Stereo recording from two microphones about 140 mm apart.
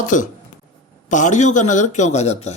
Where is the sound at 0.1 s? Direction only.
65° left (ahead or behind).